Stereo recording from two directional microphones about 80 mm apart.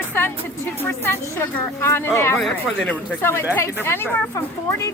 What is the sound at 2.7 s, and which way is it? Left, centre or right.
A woman's voice, centre.